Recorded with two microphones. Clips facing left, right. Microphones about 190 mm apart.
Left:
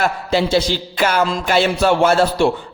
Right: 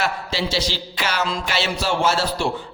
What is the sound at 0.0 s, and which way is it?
Speech, 55° left (ahead or behind).